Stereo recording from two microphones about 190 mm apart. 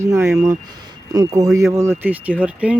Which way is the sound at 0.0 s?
15° right (ahead or behind).